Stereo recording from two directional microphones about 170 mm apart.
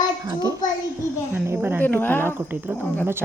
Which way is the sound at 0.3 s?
20° right (ahead or behind).